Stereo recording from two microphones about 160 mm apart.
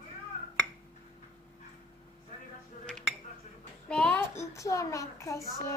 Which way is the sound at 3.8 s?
5° left (ahead or behind).